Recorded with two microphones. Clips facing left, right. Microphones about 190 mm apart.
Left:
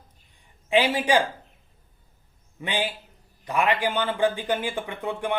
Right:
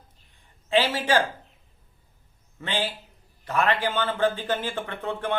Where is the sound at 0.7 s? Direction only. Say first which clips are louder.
Left 1 dB; 15° left (ahead or behind).